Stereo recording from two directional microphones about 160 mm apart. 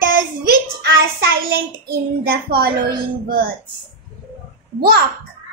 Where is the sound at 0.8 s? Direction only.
80° right.